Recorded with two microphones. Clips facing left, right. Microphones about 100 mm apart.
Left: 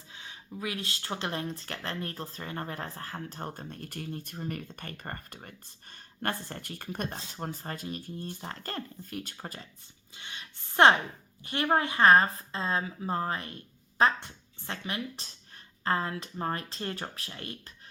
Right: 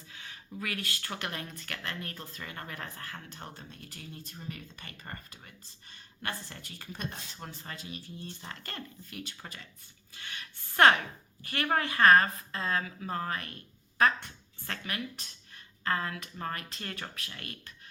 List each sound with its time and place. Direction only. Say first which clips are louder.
0.1 s speech: left 2 dB; 20° left (ahead or behind); by 9.6 s 40° left (ahead or behind)
10.2 s a woman's voice: even; 20° left (ahead or behind)